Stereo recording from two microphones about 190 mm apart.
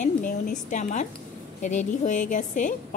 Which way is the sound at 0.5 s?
40° left (ahead or behind).